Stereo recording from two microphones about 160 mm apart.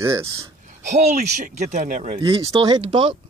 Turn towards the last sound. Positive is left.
turn(degrees=-30)  # may be behind; listen again after turning